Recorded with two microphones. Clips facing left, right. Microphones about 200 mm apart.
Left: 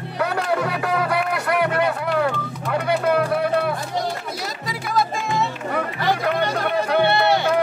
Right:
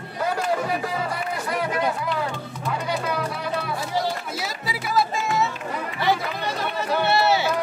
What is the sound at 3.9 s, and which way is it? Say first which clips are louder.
Music: even; 5° right (ahead or behind).